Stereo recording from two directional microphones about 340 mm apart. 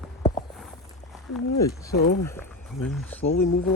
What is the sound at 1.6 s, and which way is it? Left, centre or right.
Speech, centre.